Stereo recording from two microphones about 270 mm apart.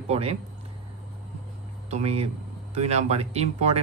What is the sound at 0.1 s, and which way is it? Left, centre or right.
Speech, right.